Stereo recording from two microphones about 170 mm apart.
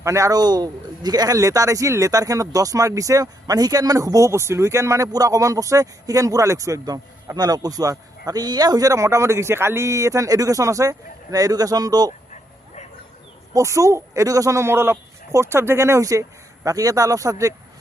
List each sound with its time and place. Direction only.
0.0 s speech: 15° right (ahead or behind)
12.3 s bow-wow: 45° left (ahead or behind)
13.5 s speech: 20° right (ahead or behind)